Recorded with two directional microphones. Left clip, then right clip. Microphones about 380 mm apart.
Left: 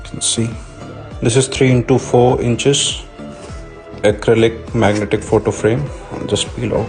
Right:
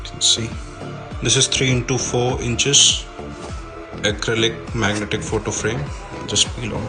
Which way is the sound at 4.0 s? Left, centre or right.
Centre.